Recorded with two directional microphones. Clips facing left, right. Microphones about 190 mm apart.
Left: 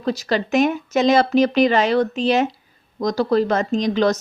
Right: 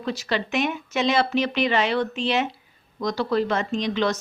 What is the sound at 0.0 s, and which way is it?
A woman's voice, 40° left (ahead or behind).